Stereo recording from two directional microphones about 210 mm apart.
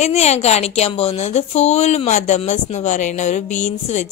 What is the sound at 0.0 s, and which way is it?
Speech, 30° left (ahead or behind).